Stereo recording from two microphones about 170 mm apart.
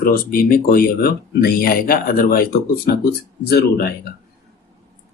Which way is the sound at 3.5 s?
65° left (ahead or behind).